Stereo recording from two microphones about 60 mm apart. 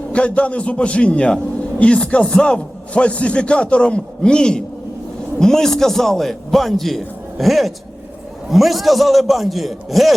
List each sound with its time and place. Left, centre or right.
0.1 s a man's voice: left; by 10.1 s centre